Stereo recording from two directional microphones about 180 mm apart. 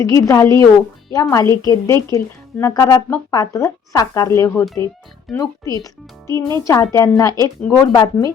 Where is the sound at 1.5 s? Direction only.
15° left (ahead or behind).